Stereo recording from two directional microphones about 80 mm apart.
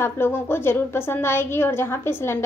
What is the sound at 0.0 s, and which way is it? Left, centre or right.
A woman's voice, left.